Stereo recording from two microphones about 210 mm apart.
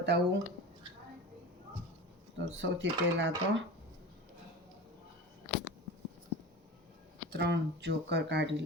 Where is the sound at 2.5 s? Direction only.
60° right (ahead or behind).